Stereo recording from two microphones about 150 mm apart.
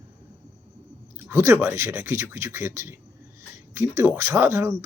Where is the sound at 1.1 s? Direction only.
15° right (ahead or behind).